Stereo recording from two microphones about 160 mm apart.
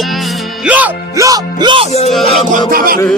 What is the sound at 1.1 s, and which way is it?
Speech, 20° right (ahead or behind).